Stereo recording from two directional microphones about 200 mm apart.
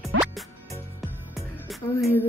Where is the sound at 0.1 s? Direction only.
90° right.